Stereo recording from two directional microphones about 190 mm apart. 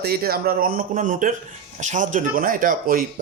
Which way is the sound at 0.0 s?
55° right (ahead or behind).